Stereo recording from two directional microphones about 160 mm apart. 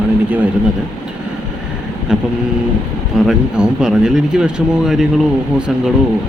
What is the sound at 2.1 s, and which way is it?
Speech, 5° right (ahead or behind).